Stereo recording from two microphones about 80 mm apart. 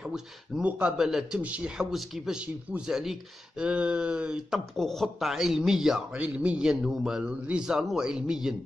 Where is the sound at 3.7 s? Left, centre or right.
Centre.